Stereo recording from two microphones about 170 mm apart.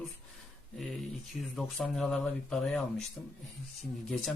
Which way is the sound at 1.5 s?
Centre (ahead or behind).